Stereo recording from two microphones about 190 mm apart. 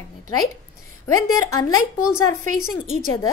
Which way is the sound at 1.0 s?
20° left (ahead or behind).